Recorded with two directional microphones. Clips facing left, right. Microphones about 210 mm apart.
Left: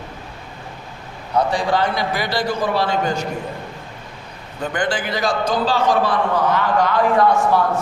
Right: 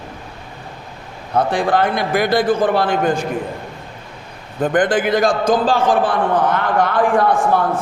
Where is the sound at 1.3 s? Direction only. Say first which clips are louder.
Right 2 dB; 55° right (ahead or behind).